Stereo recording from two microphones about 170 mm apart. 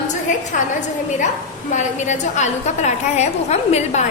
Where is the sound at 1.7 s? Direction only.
45° left (ahead or behind).